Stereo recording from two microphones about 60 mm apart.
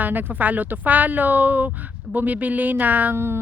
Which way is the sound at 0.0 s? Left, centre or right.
Right.